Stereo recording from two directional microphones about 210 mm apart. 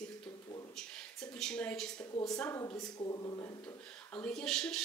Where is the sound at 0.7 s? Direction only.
5° left (ahead or behind).